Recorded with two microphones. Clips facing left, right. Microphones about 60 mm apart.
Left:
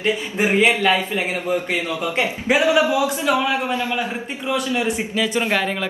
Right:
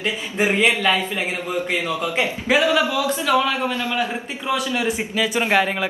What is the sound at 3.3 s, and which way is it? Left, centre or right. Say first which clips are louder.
Speech: even; centre.